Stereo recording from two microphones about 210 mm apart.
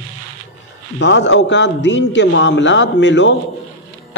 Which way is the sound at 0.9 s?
60° left (ahead or behind).